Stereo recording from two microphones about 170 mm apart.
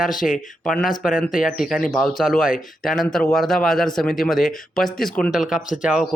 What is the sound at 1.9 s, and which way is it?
Speech, centre (ahead or behind).